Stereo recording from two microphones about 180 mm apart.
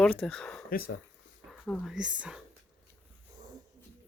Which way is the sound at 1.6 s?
5° left (ahead or behind).